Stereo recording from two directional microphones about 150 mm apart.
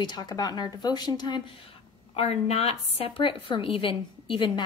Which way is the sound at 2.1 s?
45° left (ahead or behind).